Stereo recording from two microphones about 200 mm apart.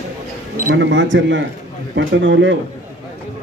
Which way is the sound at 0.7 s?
65° right (ahead or behind).